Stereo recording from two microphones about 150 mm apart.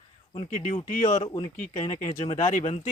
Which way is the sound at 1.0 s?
55° left (ahead or behind).